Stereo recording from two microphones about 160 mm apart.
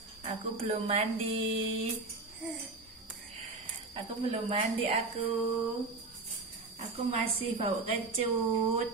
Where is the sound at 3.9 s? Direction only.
35° right (ahead or behind).